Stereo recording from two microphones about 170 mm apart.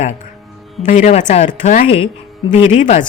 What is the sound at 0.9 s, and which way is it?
Speech, 45° left (ahead or behind).